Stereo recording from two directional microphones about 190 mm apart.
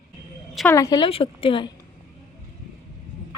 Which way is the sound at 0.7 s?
15° left (ahead or behind).